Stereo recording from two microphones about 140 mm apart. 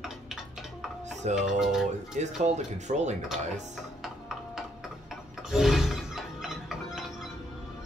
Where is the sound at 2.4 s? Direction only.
55° right (ahead or behind).